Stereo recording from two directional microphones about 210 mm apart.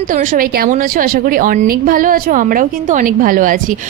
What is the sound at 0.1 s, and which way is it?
A woman's voice, 40° right (ahead or behind).